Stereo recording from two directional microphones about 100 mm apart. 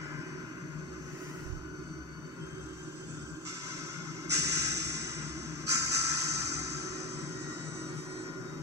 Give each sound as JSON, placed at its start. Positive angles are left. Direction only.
{"t": 4.3, "sound": "music", "side_deg": -30}